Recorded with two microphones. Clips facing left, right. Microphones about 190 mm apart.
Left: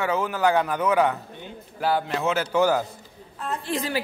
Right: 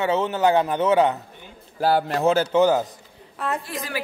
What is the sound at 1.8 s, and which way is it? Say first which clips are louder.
Speech: right 4 dB; 35° right (ahead or behind).